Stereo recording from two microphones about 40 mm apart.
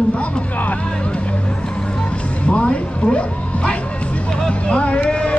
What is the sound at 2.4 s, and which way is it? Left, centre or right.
Speech, left.